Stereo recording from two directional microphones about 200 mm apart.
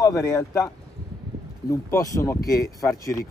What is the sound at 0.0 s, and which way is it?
Speech, 15° left (ahead or behind).